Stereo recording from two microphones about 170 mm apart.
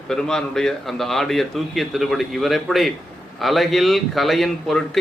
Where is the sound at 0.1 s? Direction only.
5° left (ahead or behind).